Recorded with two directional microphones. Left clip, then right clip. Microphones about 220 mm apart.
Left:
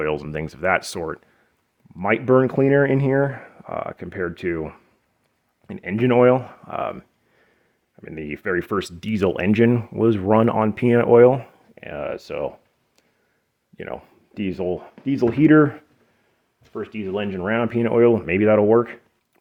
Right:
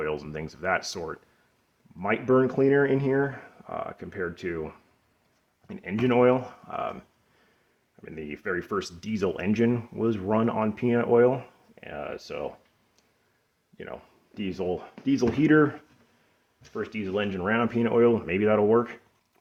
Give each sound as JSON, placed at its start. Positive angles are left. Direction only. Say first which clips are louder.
{"t": 0.0, "sound": "speech", "louder": "left 7 dB", "side_deg": 50}
{"t": 8.0, "sound": "speech", "louder": "left 6 dB", "side_deg": 45}
{"t": 13.7, "sound": "speech", "louder": "left 8 dB", "side_deg": 45}
{"t": 16.7, "sound": "speech", "louder": "left 3 dB", "side_deg": 30}